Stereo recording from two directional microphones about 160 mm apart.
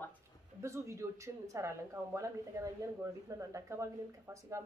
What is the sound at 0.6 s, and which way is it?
Speech, 20° right (ahead or behind).